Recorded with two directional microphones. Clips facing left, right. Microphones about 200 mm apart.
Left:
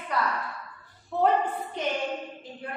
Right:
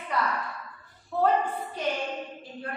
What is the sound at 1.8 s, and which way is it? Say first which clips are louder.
Music: even; 20° left (ahead or behind).